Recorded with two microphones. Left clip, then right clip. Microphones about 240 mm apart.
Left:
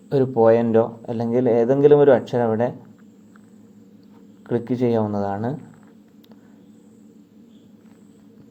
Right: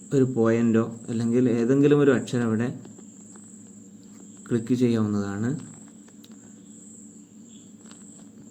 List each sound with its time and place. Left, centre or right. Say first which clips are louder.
0.1 s speech: left 7 dB; centre
4.4 s speech: left 3 dB; centre